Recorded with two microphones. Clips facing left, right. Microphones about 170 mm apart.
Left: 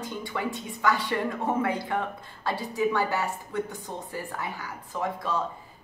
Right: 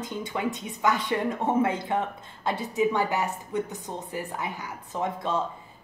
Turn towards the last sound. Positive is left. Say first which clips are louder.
# right 1 dB
turn(degrees=-25)  # may be behind; listen again after turning